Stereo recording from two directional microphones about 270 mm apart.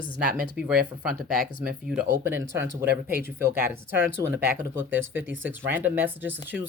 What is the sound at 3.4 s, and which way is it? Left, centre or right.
Speech, centre.